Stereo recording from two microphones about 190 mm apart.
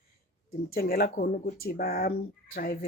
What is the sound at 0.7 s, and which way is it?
Speech, 50° left (ahead or behind).